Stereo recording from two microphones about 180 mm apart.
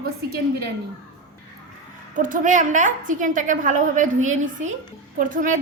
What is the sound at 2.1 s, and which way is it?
A woman's voice, 45° right (ahead or behind).